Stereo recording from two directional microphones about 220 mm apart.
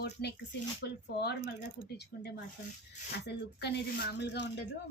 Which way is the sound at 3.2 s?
50° left (ahead or behind).